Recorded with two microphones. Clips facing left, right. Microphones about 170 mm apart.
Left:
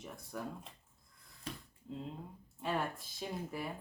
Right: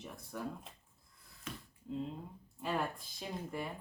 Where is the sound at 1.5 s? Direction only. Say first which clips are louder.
Left 1 dB; 35° left (ahead or behind).